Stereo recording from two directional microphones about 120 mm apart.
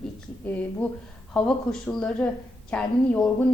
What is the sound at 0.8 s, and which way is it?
A woman's voice, 10° left (ahead or behind).